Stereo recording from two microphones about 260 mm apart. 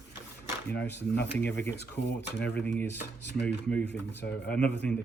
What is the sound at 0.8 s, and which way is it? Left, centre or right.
Speech, centre.